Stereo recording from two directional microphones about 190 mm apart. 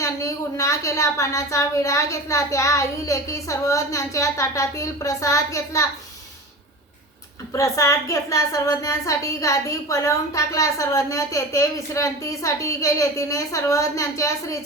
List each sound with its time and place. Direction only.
0.0 s a woman's voice: 15° left (ahead or behind)
7.5 s a woman's voice: 15° left (ahead or behind)